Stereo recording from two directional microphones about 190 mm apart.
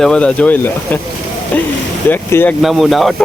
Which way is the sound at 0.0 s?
5° left (ahead or behind).